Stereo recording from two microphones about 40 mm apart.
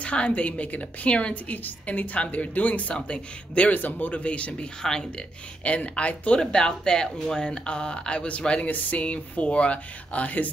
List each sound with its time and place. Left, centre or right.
0.0 s speech: left
1.5 s speech: left
3.7 s speech: left
4.8 s speech: centre
5.6 s speech: left
6.4 s speech: centre
8.6 s speech: left